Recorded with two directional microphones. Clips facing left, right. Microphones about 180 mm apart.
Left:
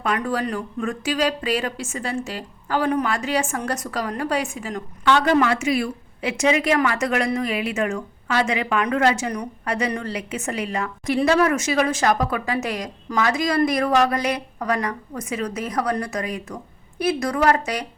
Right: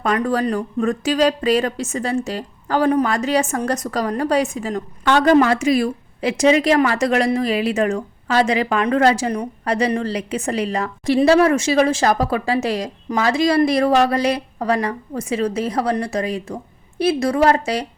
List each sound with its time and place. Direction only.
0.0 s a woman's voice: 40° right (ahead or behind)